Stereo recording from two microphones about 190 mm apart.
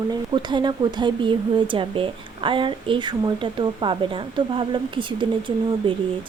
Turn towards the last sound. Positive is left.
turn(degrees=-25)  # may be behind; listen again after turning